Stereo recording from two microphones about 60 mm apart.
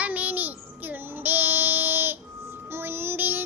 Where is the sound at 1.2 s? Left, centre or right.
Right.